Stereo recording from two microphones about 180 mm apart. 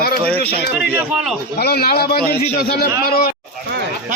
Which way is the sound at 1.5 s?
60° left (ahead or behind).